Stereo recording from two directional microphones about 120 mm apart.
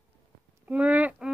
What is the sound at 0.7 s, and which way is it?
Speech, 10° right (ahead or behind).